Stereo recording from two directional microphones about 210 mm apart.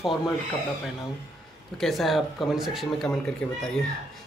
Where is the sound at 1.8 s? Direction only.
Centre (ahead or behind).